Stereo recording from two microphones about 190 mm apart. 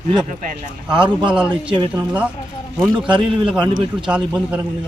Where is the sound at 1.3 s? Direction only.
5° right (ahead or behind).